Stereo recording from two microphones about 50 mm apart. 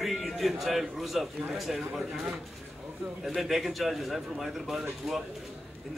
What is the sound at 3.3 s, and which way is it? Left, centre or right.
A man's voice, centre.